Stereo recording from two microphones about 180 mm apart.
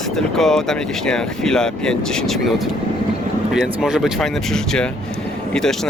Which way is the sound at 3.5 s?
5° right (ahead or behind).